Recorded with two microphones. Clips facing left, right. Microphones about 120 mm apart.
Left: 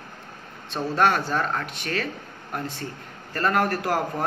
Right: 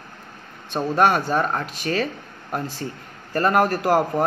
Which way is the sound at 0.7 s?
20° right (ahead or behind).